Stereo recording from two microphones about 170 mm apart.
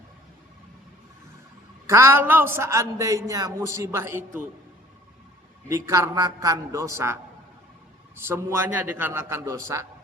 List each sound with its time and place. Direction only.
1.9 s a man's voice: 15° right (ahead or behind)
5.6 s a man's voice: 15° right (ahead or behind)